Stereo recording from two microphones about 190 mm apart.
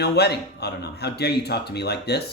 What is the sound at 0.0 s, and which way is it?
Speech, 60° left (ahead or behind).